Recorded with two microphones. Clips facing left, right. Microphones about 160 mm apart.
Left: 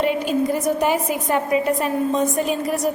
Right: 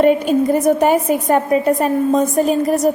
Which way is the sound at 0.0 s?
50° right (ahead or behind).